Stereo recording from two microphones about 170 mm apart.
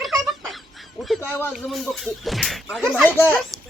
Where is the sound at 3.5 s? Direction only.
20° right (ahead or behind).